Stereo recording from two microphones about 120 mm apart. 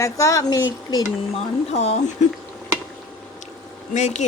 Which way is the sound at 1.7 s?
65° left (ahead or behind).